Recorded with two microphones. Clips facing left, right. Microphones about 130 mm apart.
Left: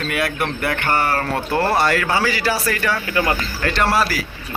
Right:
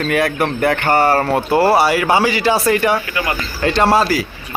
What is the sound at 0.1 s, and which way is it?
Speech, 40° right (ahead or behind).